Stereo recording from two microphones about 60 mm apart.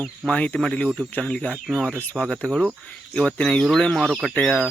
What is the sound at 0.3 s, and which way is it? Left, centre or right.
Speech, left.